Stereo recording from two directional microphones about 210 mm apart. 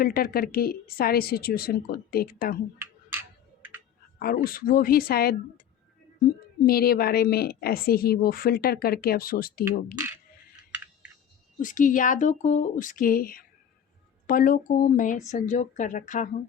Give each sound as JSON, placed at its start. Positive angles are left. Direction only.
{"t": 0.0, "sound": "a woman's voice", "side_deg": 45}
{"t": 2.7, "sound": "computer keyboard", "side_deg": -10}
{"t": 4.2, "sound": "a woman's voice", "side_deg": 45}
{"t": 6.7, "sound": "a woman's voice", "side_deg": 45}
{"t": 11.6, "sound": "a woman's voice", "side_deg": 40}